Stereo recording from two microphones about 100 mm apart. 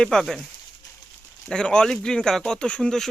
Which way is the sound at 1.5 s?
10° left (ahead or behind).